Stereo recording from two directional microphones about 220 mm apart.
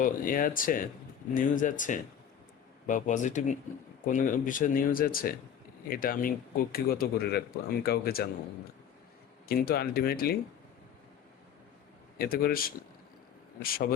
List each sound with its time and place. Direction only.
0.0 s speech: 40° left (ahead or behind)
9.5 s speech: 45° left (ahead or behind)
12.2 s speech: 40° left (ahead or behind)